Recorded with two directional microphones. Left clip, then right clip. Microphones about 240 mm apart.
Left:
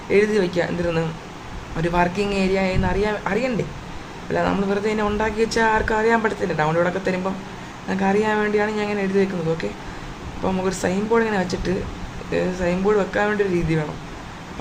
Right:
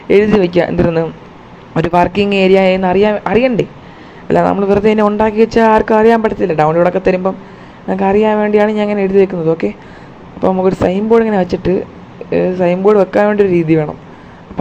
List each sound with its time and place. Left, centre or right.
0.1 s speech: right